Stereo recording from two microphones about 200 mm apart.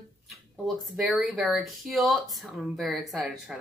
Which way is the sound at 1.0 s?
Centre (ahead or behind).